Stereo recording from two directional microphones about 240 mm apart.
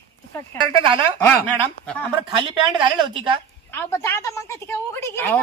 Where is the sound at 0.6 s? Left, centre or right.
Right.